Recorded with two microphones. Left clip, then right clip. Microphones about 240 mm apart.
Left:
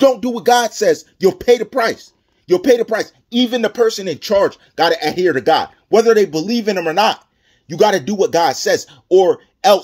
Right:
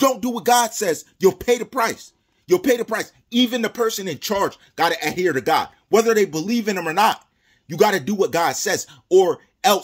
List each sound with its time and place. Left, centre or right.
0.0 s speech: centre